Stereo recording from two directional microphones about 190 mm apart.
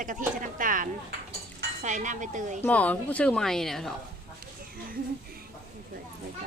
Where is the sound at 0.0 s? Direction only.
45° right (ahead or behind).